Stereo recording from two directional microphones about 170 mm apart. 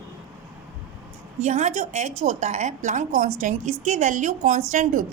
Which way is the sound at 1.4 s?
45° right (ahead or behind).